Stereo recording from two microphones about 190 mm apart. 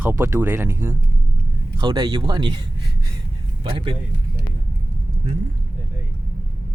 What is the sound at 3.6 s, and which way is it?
Speech, 25° right (ahead or behind).